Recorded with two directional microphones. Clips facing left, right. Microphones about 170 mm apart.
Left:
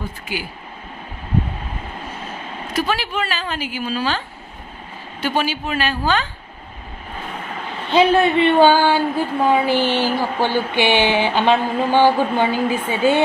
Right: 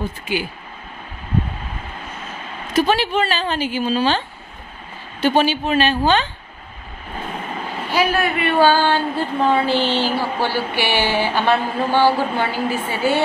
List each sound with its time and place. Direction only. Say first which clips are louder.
2.7 s speech: right 5 dB; 25° right (ahead or behind)
5.2 s speech: right 5 dB; 25° right (ahead or behind)
7.9 s a woman's voice: left 5 dB; 25° left (ahead or behind)